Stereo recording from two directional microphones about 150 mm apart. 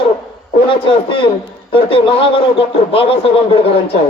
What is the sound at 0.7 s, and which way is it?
Speech, 35° left (ahead or behind).